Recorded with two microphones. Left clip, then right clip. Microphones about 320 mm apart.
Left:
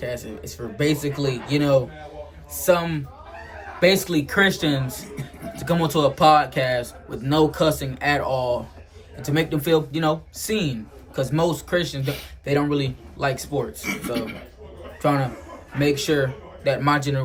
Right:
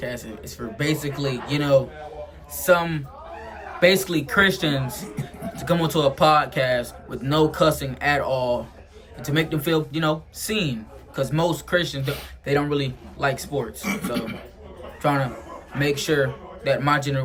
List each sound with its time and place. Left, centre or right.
0.0 s speech: centre
13.8 s speech: centre
15.0 s a man's voice: centre